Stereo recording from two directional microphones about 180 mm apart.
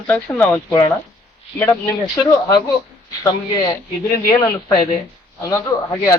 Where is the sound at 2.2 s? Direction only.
20° left (ahead or behind).